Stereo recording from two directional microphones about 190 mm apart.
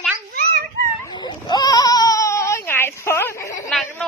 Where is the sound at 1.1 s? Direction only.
25° left (ahead or behind).